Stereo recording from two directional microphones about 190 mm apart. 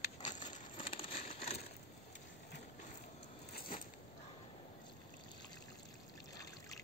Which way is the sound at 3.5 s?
50° left (ahead or behind).